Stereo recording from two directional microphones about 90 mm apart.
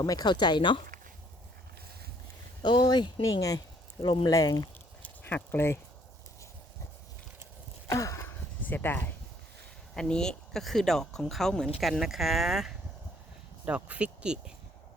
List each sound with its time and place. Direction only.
0.0 s speech: 45° left (ahead or behind); by 0.9 s 65° left (ahead or behind)
2.6 s speech: 55° left (ahead or behind)
4.0 s speech: 70° left (ahead or behind)
4.3 s speech: 45° left (ahead or behind)
5.0 s a sound: 20° left (ahead or behind)
7.9 s a sound: 35° left (ahead or behind); by 9.0 s 20° left (ahead or behind)
9.9 s speech: 10° left (ahead or behind)
13.7 s speech: 15° right (ahead or behind)